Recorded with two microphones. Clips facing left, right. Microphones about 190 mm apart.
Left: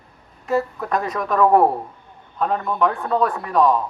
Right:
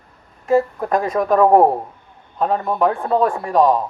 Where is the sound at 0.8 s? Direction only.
45° right (ahead or behind).